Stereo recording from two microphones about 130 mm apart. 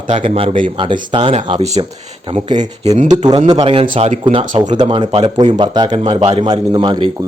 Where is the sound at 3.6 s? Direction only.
45° right (ahead or behind).